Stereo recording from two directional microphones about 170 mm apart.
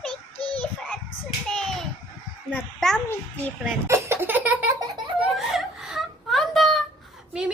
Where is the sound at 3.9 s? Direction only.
15° right (ahead or behind).